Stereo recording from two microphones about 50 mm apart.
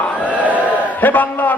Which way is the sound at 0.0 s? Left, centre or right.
Left.